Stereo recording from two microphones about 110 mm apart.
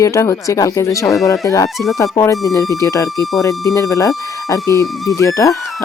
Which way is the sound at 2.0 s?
30° left (ahead or behind).